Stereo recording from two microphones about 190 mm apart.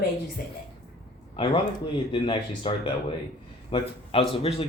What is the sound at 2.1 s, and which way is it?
Speech, 25° left (ahead or behind).